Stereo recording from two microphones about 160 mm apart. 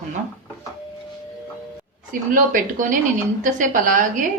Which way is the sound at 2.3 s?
55° right (ahead or behind).